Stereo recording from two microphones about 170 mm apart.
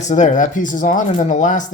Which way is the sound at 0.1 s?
45° left (ahead or behind).